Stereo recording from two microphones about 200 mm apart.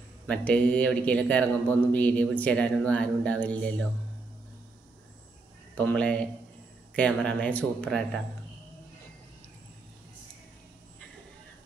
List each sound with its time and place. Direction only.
0.3 s speech: 5° left (ahead or behind)
5.8 s speech: 5° left (ahead or behind)